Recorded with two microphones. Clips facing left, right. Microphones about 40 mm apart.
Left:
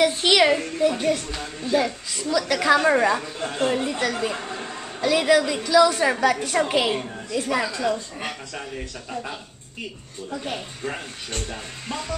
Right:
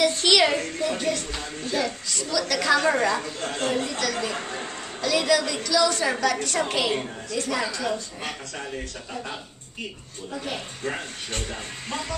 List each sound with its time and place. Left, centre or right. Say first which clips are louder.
0.0 s a woman's voice: left 2 dB; centre
4.4 s a woman's voice: even; centre
5.0 s a woman's voice: left 4 dB; centre